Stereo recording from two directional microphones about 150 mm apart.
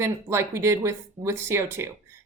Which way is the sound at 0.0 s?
15° right (ahead or behind).